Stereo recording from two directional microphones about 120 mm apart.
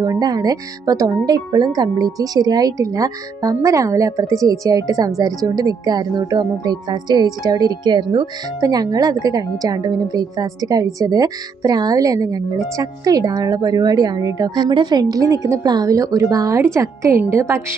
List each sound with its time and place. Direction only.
0.0 s a woman's voice: 30° right (ahead or behind)